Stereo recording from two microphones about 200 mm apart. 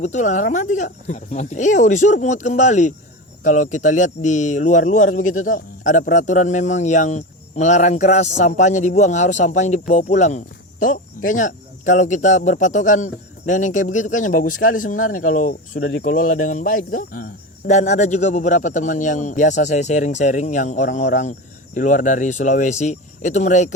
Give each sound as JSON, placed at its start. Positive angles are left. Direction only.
{"t": 0.0, "sound": "speech", "side_deg": 35}